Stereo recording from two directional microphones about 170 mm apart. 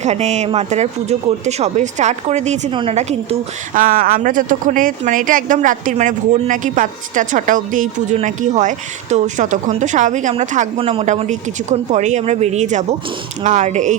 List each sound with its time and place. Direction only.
0.0 s speech: 40° right (ahead or behind)
3.8 s speech: 55° right (ahead or behind)
10.8 s speech: 35° right (ahead or behind)